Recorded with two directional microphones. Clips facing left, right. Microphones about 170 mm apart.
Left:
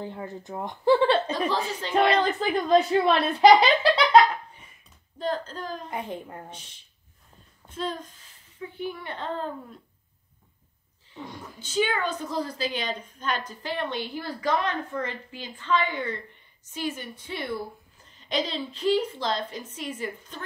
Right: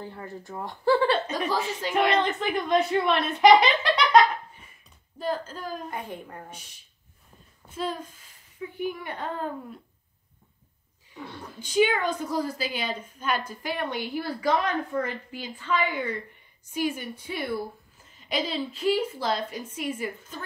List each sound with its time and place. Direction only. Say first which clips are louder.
0.0 s a woman's voice: left 3 dB; 20° left (ahead or behind)
1.5 s a woman's voice: even; 10° right (ahead or behind)
2.2 s speech: left 2 dB; 35° left (ahead or behind)
5.2 s a woman's voice: left 1 dB; 10° right (ahead or behind)
5.9 s a child's voice: left 2 dB; 25° left (ahead or behind)
7.6 s a woman's voice: right 1 dB; 10° right (ahead or behind)
11.2 s a woman's voice: right 2 dB; 10° left (ahead or behind)
11.6 s a woman's voice: right 3 dB; 15° right (ahead or behind)